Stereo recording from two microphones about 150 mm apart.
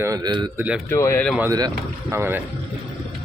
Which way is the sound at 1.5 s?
25° right (ahead or behind).